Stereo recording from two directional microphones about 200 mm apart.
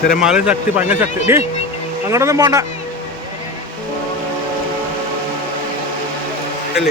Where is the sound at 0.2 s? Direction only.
5° right (ahead or behind).